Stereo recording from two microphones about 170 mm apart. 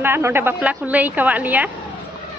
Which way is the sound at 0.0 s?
15° right (ahead or behind).